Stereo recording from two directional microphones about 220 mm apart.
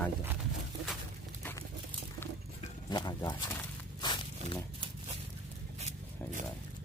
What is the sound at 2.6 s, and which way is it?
Speech, 20° left (ahead or behind).